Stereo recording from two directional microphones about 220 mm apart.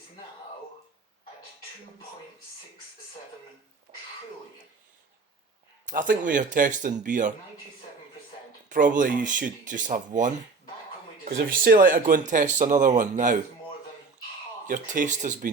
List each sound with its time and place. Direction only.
5.8 s speech: 40° right (ahead or behind)
9.0 s speech: 35° right (ahead or behind)
14.7 s speech: 35° right (ahead or behind)